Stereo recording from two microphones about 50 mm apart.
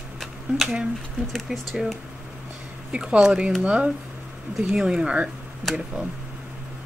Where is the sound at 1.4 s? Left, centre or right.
Centre.